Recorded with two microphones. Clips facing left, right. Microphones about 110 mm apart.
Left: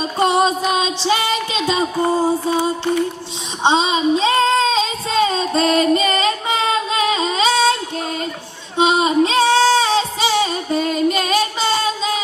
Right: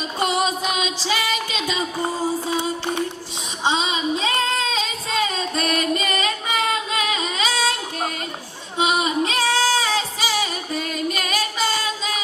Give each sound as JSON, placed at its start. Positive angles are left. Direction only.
{"t": 0.0, "sound": "music", "side_deg": 30}
{"t": 3.6, "sound": "female singing", "side_deg": 30}
{"t": 8.8, "sound": "singing", "side_deg": 25}